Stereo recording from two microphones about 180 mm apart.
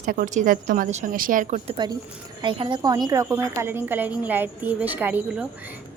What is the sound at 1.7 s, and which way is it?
A woman's voice, 25° right (ahead or behind).